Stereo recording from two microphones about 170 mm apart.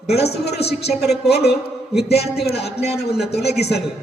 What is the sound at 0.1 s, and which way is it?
Speech, 70° left (ahead or behind).